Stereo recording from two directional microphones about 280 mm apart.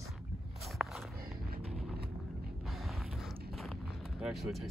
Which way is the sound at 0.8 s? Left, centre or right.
Centre.